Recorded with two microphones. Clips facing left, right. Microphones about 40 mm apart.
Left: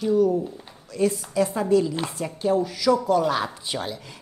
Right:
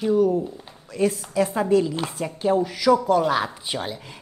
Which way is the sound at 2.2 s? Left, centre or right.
Centre.